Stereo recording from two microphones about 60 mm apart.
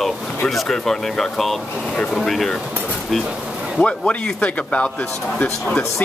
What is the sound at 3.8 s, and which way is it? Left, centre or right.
Speech, centre.